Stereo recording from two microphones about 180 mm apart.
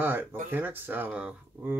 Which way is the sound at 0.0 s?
10° right (ahead or behind).